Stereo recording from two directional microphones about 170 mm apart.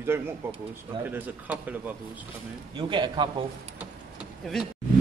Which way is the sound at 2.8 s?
25° right (ahead or behind).